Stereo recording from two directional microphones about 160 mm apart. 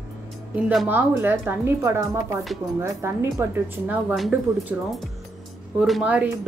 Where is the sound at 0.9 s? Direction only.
15° right (ahead or behind).